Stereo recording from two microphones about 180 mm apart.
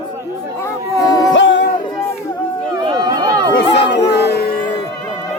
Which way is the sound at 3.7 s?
70° left (ahead or behind).